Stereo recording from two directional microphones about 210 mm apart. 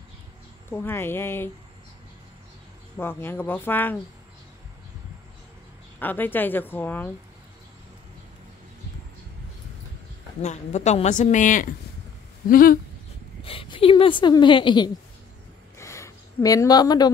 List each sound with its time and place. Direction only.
0.7 s a woman's voice: 10° left (ahead or behind)
3.0 s a woman's voice: 10° left (ahead or behind)
5.9 s a woman's voice: 10° left (ahead or behind)
10.4 s speech: 35° left (ahead or behind)
13.4 s a woman's voice: 25° left (ahead or behind)
15.8 s a sound: 15° left (ahead or behind)